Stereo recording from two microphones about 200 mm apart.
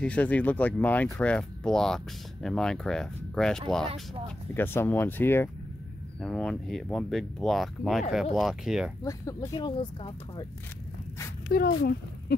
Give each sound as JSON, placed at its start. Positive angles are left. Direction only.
{"t": 0.0, "sound": "speech", "side_deg": 5}
{"t": 9.0, "sound": "speech", "side_deg": 15}
{"t": 11.4, "sound": "speech", "side_deg": 50}